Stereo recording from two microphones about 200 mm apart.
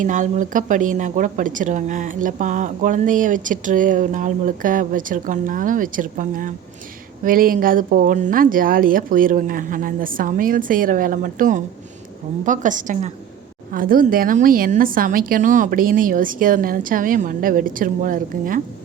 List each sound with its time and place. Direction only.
0.0 s a woman's voice: 40° right (ahead or behind)